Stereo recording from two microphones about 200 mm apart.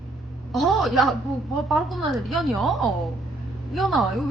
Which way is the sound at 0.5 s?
Centre (ahead or behind).